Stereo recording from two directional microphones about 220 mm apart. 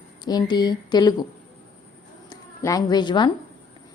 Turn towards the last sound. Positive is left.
turn(degrees=20)  # may be behind; listen again after turning